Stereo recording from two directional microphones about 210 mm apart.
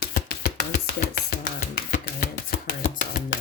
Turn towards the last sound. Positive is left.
turn(degrees=40)  # may be behind; listen again after turning